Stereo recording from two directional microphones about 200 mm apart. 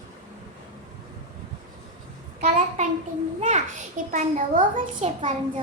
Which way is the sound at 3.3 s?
35° right (ahead or behind).